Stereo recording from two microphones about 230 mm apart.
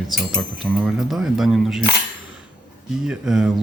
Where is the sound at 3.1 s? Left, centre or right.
Centre.